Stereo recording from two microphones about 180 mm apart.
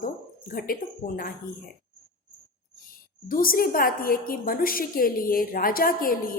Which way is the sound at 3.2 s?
50° left (ahead or behind).